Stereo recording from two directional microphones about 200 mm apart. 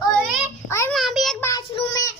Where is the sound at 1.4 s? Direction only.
15° left (ahead or behind).